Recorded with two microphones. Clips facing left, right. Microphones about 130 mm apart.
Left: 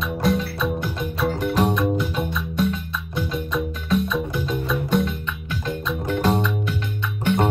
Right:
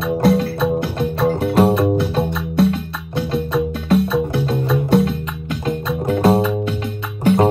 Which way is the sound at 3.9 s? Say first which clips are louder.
Right 6 dB; 65° right (ahead or behind).